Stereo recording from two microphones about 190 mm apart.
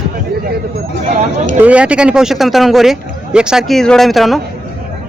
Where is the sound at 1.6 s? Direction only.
5° right (ahead or behind).